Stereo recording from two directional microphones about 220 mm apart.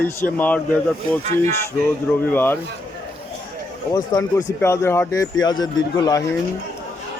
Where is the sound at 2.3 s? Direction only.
10° left (ahead or behind).